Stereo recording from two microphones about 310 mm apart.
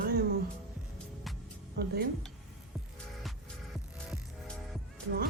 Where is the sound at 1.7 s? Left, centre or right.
Right.